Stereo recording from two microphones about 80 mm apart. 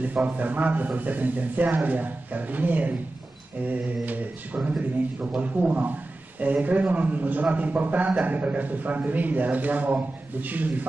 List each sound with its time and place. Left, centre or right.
0.0 s a man's voice: right